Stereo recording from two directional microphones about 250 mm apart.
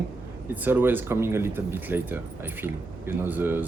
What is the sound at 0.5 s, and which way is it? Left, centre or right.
Speech, centre.